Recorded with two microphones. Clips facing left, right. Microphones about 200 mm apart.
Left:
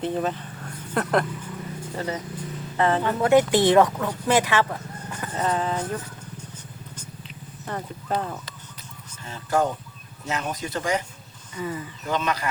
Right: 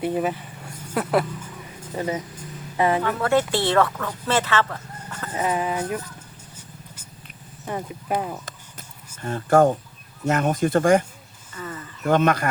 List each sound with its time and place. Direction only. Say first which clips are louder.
0.0 s speech: right 2 dB; 10° right (ahead or behind)
3.0 s speech: left 2 dB; 15° left (ahead or behind)
5.3 s speech: right 1 dB; 10° right (ahead or behind)
7.6 s speech: right 3 dB; 15° right (ahead or behind)
9.2 s speech: right 7 dB; 50° right (ahead or behind)
11.5 s speech: left 4 dB; 10° left (ahead or behind)
12.0 s speech: right 7 dB; 55° right (ahead or behind)